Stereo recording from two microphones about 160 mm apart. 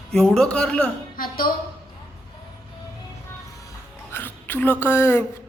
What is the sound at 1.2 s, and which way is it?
Speech, 65° left (ahead or behind).